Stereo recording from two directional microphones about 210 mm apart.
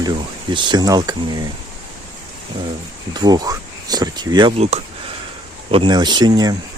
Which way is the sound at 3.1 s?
20° right (ahead or behind).